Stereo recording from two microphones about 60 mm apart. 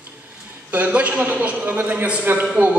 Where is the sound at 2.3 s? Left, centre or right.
Right.